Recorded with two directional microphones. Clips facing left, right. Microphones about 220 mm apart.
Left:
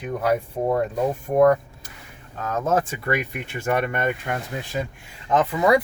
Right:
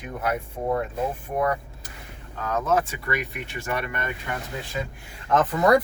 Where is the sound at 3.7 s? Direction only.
50° left (ahead or behind).